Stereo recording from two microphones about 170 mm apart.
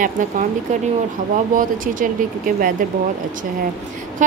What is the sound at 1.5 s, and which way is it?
A woman's voice, 55° right (ahead or behind).